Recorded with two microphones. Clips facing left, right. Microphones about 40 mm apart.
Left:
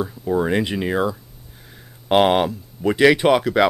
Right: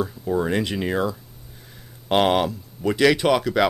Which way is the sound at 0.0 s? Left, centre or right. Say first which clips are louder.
Left 2 dB; centre.